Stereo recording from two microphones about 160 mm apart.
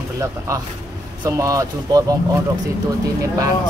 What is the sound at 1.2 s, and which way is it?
Speech, 20° right (ahead or behind).